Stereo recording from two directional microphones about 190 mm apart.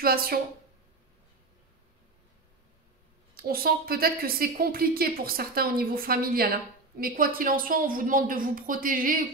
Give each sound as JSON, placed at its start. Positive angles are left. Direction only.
{"t": 0.0, "sound": "a woman's voice", "side_deg": -50}
{"t": 3.3, "sound": "a woman's voice", "side_deg": -50}